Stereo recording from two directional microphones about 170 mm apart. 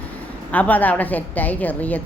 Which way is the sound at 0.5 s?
10° left (ahead or behind).